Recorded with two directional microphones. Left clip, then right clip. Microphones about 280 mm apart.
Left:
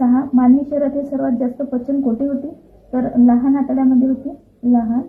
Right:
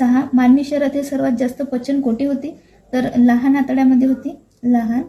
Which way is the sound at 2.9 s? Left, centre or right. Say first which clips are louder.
Even; right.